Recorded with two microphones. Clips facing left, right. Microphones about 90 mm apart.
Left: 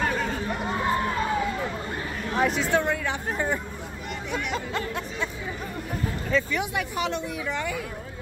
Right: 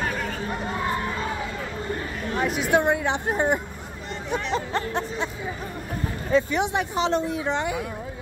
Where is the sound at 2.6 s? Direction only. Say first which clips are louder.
Right 3 dB; 15° right (ahead or behind).